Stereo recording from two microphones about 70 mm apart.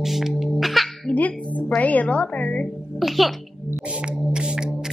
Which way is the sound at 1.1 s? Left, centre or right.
Left.